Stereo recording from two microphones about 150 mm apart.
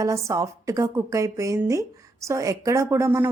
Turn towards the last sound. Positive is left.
turn(degrees=-20)  # may be behind; listen again after turning